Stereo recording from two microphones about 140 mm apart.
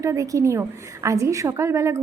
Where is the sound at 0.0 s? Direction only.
25° right (ahead or behind).